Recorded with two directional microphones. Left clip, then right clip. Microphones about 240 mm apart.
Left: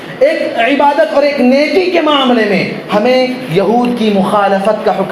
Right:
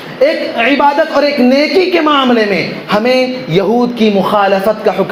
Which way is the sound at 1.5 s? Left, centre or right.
Right.